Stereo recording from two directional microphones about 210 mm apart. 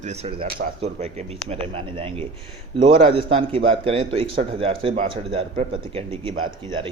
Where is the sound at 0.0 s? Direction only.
30° right (ahead or behind).